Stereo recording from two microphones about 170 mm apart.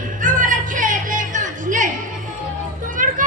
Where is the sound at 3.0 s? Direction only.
50° right (ahead or behind).